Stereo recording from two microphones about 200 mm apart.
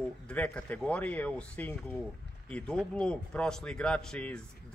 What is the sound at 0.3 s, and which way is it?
Speech, 5° left (ahead or behind).